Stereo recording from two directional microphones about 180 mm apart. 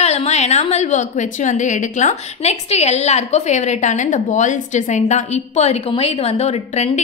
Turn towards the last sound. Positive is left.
turn(degrees=35)  # may be behind; listen again after turning